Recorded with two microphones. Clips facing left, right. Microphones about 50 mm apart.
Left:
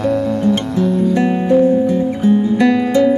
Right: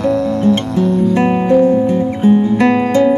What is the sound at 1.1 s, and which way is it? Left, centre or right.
Music, right.